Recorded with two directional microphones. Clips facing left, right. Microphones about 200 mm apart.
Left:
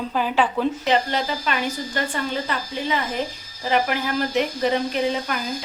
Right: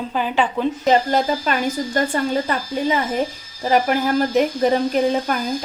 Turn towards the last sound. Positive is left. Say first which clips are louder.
# right 5 dB
turn(degrees=-45)  # may be behind; listen again after turning